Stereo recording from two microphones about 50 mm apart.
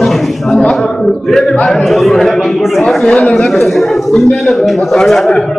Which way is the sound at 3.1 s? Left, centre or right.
Centre.